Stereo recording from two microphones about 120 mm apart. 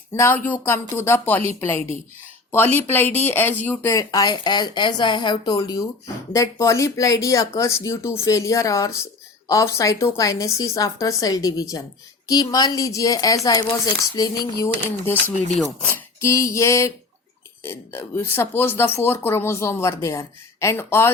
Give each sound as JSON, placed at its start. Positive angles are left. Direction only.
{"t": 0.1, "sound": "speech", "side_deg": 20}